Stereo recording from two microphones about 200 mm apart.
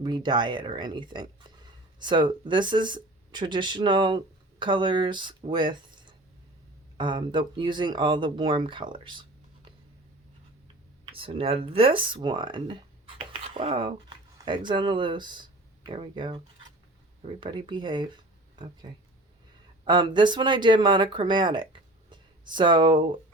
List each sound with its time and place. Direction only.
0.0 s speech: 20° right (ahead or behind)
11.1 s speech: 25° right (ahead or behind)